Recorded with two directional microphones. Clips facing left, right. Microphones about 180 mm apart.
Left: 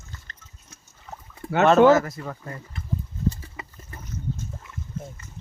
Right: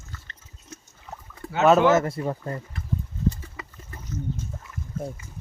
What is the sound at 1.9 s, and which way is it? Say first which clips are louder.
Speech: right 2 dB; 25° right (ahead or behind).